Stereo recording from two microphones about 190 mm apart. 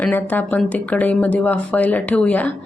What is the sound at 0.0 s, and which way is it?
Speech, 10° left (ahead or behind).